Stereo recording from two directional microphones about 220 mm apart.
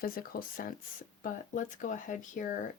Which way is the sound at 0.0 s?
40° left (ahead or behind).